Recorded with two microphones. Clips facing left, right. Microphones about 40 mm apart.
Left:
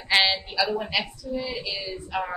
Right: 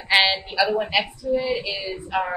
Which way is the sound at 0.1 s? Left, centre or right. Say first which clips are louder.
Right 3 dB; centre.